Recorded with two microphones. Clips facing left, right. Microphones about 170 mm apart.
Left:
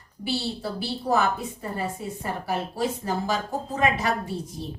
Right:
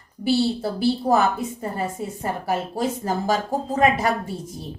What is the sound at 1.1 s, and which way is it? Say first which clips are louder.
Speech: right 3 dB; 45° right (ahead or behind).